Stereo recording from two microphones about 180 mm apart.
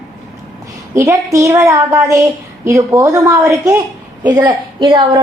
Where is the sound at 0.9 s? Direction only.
15° right (ahead or behind).